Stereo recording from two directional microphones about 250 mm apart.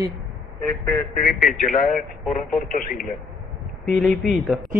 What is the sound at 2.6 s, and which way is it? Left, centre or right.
Speech, left.